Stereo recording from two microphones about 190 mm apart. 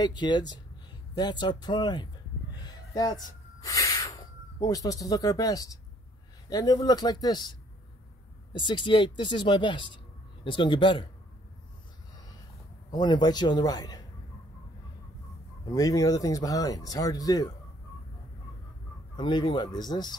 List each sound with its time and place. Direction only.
0.0 s speech: 25° left (ahead or behind)
2.6 s a sound: 20° left (ahead or behind)
3.6 s speech: 15° left (ahead or behind)
8.5 s speech: 25° left (ahead or behind)
12.9 s speech: 20° left (ahead or behind)
15.7 s speech: 20° left (ahead or behind)
19.1 s speech: 25° left (ahead or behind)